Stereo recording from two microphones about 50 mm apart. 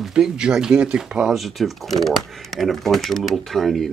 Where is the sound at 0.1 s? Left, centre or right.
Centre.